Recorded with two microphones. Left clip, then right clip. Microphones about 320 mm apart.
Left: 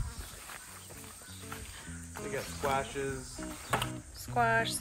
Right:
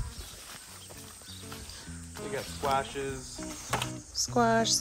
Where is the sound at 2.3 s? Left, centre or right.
Right.